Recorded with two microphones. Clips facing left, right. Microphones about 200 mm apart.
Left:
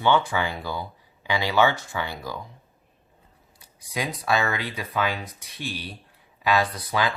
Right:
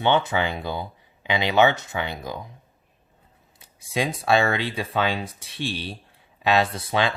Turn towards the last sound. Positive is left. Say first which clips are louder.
# right 2 dB
turn(degrees=-25)  # may be behind; listen again after turning